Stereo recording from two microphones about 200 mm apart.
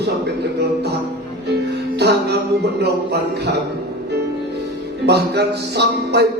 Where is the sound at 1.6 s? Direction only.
55° right (ahead or behind).